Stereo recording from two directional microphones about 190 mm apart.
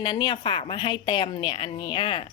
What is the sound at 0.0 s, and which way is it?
Speech, 25° left (ahead or behind).